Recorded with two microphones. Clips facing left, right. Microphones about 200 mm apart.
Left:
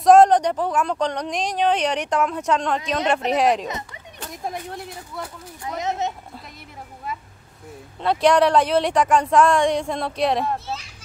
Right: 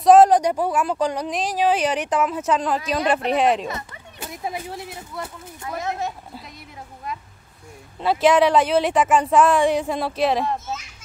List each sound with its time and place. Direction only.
0.0 s a woman's voice: 5° right (ahead or behind)
3.6 s a child's voice: 20° left (ahead or behind)
4.2 s a woman's voice: 5° right (ahead or behind)
5.6 s speech: 20° left (ahead or behind)
8.0 s a woman's voice: 5° right (ahead or behind)